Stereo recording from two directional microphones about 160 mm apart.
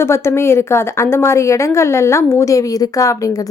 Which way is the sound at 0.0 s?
15° left (ahead or behind).